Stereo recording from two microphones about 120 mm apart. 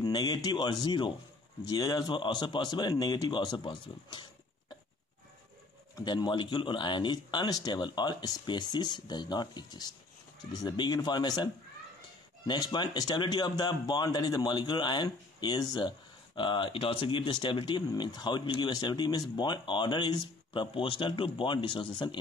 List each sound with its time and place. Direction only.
0.0 s speech: 35° left (ahead or behind)
5.9 s speech: 40° left (ahead or behind)